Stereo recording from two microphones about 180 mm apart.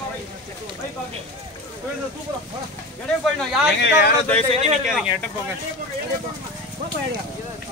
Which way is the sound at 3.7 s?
70° left (ahead or behind).